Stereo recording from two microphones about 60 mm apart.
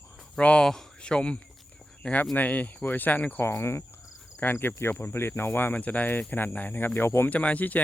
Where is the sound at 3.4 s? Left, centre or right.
Left.